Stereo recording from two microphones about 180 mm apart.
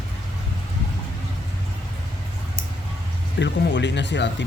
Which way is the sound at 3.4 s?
80° left.